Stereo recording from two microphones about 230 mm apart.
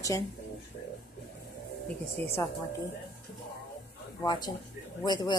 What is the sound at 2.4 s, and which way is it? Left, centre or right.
Speech, centre.